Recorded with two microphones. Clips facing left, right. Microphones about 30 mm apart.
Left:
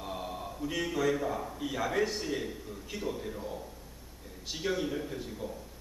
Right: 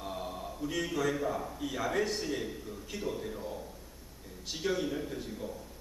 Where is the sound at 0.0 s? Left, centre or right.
Centre.